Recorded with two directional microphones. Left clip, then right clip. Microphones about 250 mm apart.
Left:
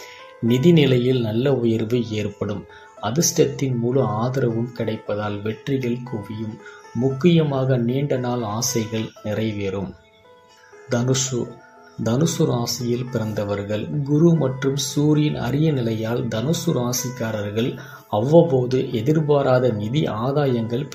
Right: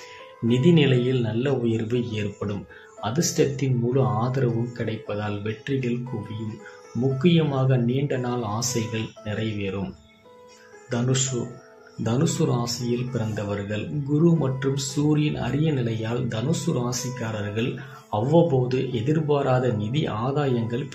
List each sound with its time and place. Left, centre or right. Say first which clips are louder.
0.5 s speech: left 3 dB; centre
7.2 s speech: left 4 dB; centre
12.0 s speech: left 4 dB; centre